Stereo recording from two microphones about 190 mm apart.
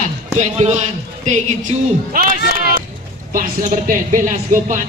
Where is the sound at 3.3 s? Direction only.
45° right (ahead or behind).